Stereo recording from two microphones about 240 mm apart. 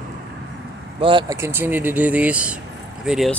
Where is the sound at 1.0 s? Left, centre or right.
Centre.